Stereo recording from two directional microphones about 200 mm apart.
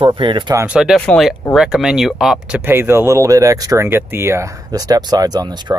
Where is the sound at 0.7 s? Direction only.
5° right (ahead or behind).